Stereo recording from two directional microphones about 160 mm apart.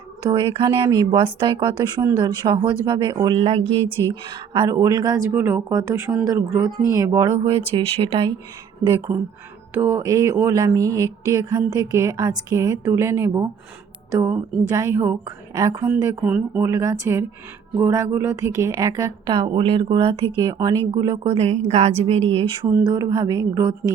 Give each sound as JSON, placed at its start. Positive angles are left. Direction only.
{"t": 0.3, "sound": "a woman's voice", "side_deg": -30}
{"t": 4.1, "sound": "a woman's voice", "side_deg": -30}
{"t": 5.3, "sound": "speech", "side_deg": -15}
{"t": 8.9, "sound": "a woman's voice", "side_deg": -20}
{"t": 21.3, "sound": "a woman's voice", "side_deg": -45}